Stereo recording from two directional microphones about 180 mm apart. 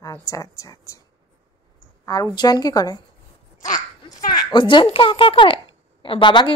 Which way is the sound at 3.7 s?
20° left (ahead or behind).